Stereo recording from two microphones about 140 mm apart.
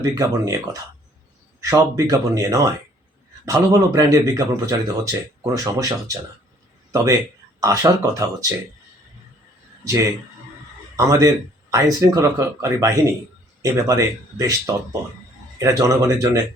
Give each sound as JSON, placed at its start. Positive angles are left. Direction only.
{"t": 0.0, "sound": "speech", "side_deg": -25}
{"t": 9.8, "sound": "speech", "side_deg": -20}